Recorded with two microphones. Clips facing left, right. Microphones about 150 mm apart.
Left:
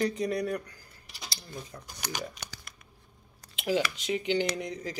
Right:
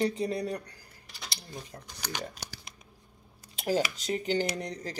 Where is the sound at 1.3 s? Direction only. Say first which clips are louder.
Left 1 dB; 30° right (ahead or behind).